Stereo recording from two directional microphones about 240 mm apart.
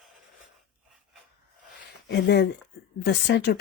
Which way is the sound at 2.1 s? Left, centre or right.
Left.